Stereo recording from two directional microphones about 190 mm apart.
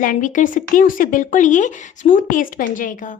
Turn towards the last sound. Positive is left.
turn(degrees=45)  # may be behind; listen again after turning